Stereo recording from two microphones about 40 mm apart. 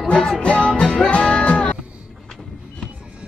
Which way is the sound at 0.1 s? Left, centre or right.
Left.